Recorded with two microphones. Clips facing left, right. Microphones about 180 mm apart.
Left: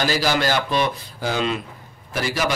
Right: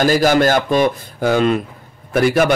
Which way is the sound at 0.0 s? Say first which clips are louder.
Right 8 dB; 50° right (ahead or behind).